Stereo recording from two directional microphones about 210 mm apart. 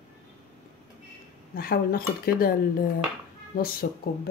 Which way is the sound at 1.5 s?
45° left (ahead or behind).